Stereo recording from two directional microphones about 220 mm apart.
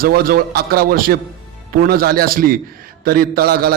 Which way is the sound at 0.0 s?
40° right (ahead or behind).